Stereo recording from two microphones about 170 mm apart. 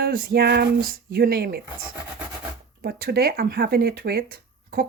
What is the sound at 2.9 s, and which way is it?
Speech, 65° right (ahead or behind).